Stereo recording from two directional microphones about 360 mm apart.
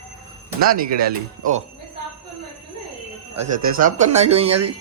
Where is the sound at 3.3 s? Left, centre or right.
Right.